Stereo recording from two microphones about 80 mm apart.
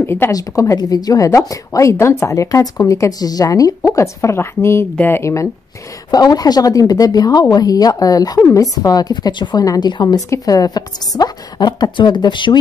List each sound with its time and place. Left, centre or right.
0.0 s a woman's voice: left
0.3 s a woman's voice: left
6.1 s a woman's voice: left
10.0 s a woman's voice: left